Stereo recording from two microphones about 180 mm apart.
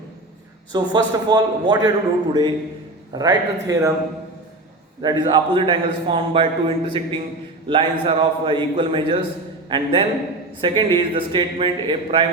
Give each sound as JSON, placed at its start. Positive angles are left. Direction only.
{"t": 0.7, "sound": "a man's voice", "side_deg": -20}
{"t": 5.0, "sound": "a man's voice", "side_deg": -25}